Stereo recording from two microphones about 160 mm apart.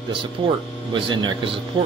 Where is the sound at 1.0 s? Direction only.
35° right (ahead or behind).